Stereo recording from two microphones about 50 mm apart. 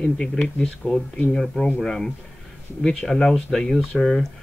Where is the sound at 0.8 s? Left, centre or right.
Left.